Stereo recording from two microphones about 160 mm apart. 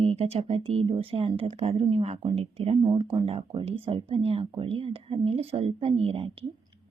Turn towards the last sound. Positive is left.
turn(degrees=-35)  # may be behind; listen again after turning